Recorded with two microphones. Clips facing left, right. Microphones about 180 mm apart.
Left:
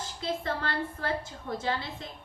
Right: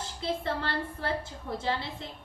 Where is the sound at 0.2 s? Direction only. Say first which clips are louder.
Right 1 dB; 30° right (ahead or behind).